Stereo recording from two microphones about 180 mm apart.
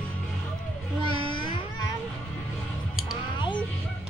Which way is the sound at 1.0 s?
25° left (ahead or behind).